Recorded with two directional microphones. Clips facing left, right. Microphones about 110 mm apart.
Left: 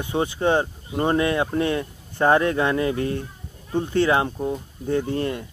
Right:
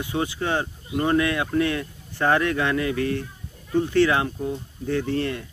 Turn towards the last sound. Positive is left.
turn(degrees=20)  # may be behind; listen again after turning